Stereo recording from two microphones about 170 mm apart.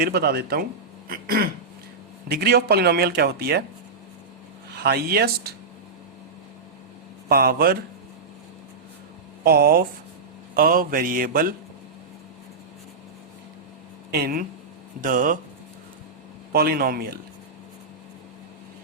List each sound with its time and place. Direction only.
0.0 s speech: 70° right (ahead or behind)
1.0 s a sound: 60° right (ahead or behind)
2.3 s speech: 70° right (ahead or behind)
4.7 s speech: 65° right (ahead or behind)
7.3 s speech: 65° right (ahead or behind)
9.4 s speech: 65° right (ahead or behind)
14.1 s speech: 60° right (ahead or behind)
15.0 s speech: 50° right (ahead or behind)
16.5 s speech: 65° right (ahead or behind)